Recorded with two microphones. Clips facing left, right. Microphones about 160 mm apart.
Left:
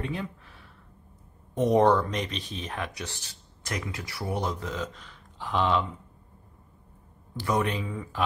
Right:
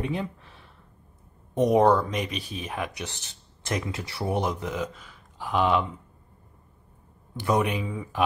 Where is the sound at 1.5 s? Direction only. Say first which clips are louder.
Right 1 dB; 10° right (ahead or behind).